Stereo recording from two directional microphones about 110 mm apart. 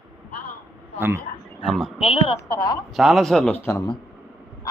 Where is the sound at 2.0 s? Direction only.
60° left (ahead or behind).